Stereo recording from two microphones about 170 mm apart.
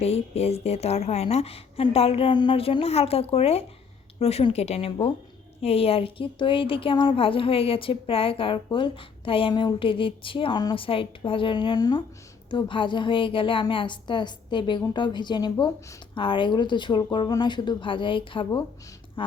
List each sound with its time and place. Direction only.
0.0 s a woman's voice: 35° left (ahead or behind)